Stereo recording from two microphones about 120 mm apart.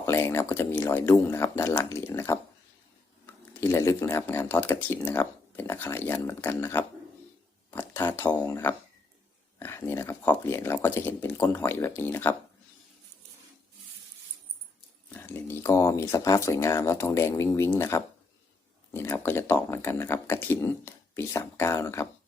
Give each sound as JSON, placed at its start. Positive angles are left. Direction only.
{"t": 0.0, "sound": "speech", "side_deg": 25}
{"t": 3.6, "sound": "speech", "side_deg": 25}
{"t": 15.1, "sound": "speech", "side_deg": 20}